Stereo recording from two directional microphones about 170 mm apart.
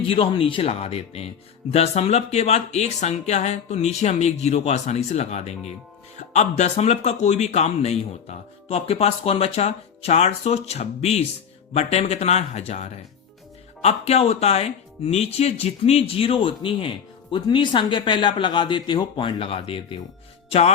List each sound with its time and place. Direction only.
0.0 s speech: 30° left (ahead or behind)